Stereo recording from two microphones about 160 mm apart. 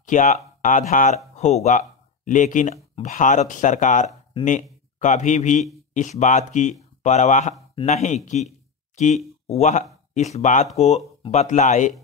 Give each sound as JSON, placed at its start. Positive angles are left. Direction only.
{"t": 0.0, "sound": "speech", "side_deg": 50}
{"t": 8.3, "sound": "a sound", "side_deg": 45}
{"t": 9.5, "sound": "speech", "side_deg": 45}